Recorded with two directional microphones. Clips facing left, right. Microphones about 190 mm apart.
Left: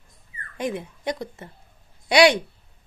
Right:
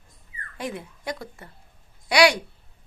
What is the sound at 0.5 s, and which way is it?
A woman's voice, 20° left (ahead or behind).